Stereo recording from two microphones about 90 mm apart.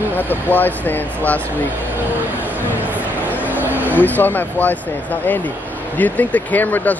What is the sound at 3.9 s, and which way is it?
Speech, 20° left (ahead or behind).